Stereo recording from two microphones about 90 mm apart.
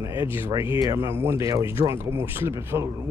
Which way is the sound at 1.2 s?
35° right (ahead or behind).